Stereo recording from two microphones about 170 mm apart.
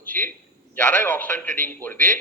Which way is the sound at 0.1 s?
10° left (ahead or behind).